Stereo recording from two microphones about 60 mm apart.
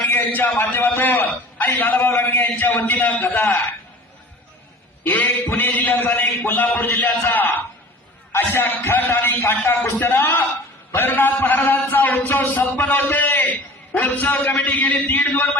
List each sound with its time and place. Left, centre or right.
0.1 s a sound: left
0.7 s a man's voice: left
5.0 s a man's voice: left